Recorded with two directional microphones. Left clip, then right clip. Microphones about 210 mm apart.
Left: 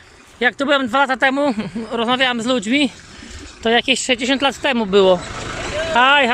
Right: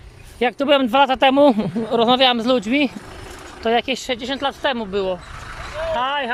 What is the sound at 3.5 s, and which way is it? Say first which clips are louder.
Speech: left 3 dB; 5° right (ahead or behind).